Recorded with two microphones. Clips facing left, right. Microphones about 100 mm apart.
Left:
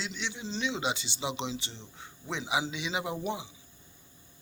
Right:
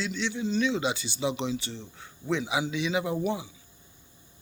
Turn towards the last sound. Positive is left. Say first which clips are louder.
# right 5 dB
turn(degrees=20)  # may be behind; listen again after turning